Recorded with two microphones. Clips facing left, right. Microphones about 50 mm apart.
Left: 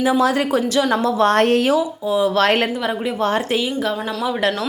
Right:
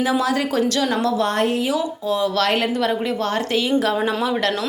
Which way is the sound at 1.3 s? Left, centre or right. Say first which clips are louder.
Left 5 dB; left.